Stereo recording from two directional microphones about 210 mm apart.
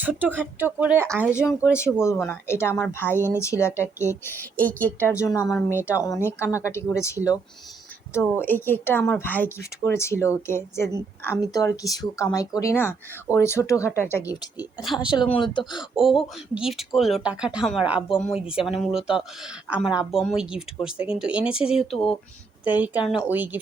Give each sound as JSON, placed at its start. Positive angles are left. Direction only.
{"t": 0.0, "sound": "speech", "side_deg": -10}
{"t": 1.3, "sound": "speech", "side_deg": 15}
{"t": 5.5, "sound": "speech", "side_deg": 5}
{"t": 6.0, "sound": "speech", "side_deg": 15}
{"t": 14.8, "sound": "speech", "side_deg": 0}
{"t": 15.1, "sound": "speech", "side_deg": 25}
{"t": 16.0, "sound": "speech", "side_deg": 0}